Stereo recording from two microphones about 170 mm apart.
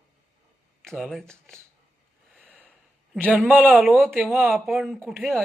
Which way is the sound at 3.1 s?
5° right (ahead or behind).